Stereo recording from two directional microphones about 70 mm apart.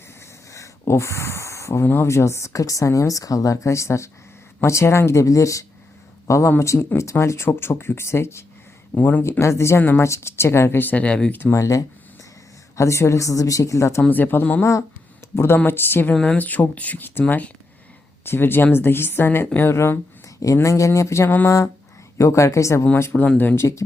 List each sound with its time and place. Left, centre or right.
0.5 s a sound: left
1.9 s speech: left
9.0 s speech: left
9.4 s speech: left
11.5 s speech: left
14.1 s speech: left
14.6 s speech: left
15.4 s speech: left
16.1 s speech: centre
16.4 s speech: left
23.1 s speech: centre
23.6 s speech: left